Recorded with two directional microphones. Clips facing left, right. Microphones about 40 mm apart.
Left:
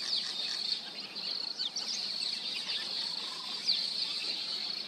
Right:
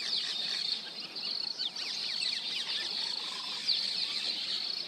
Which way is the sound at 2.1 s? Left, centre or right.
Right.